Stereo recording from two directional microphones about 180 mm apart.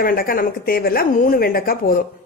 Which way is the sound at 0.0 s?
55° left (ahead or behind).